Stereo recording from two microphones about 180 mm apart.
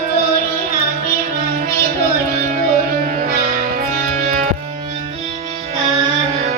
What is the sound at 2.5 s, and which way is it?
Music, 45° right (ahead or behind).